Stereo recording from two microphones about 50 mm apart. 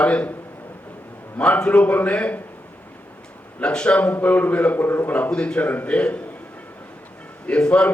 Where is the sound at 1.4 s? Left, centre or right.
Left.